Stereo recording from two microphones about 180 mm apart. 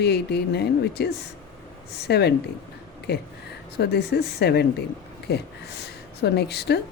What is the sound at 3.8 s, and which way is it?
Speech, 65° left (ahead or behind).